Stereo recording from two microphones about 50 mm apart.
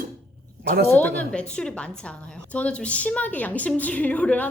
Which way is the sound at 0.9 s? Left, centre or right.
Left.